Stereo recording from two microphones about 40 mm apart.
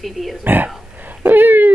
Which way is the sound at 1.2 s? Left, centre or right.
Right.